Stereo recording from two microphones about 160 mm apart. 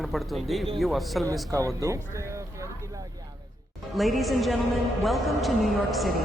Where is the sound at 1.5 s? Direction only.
20° right (ahead or behind).